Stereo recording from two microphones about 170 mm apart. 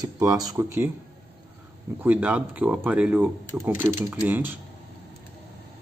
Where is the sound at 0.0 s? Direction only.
20° right (ahead or behind).